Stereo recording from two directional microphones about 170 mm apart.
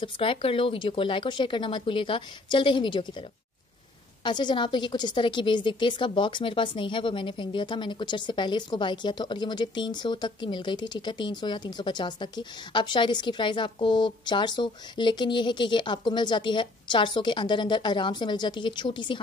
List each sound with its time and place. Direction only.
0.0 s a woman's voice: 30° left (ahead or behind)